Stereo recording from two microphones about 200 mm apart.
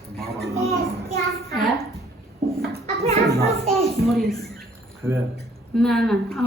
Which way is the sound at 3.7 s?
Centre (ahead or behind).